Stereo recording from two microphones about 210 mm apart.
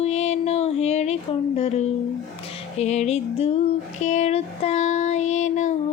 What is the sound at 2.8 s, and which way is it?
Speech, 30° left (ahead or behind).